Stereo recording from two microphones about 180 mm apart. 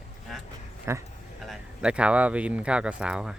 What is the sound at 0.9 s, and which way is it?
Speech, 15° right (ahead or behind).